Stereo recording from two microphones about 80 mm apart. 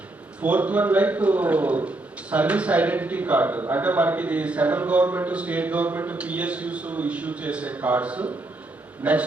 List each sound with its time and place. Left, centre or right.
0.4 s a man's voice: centre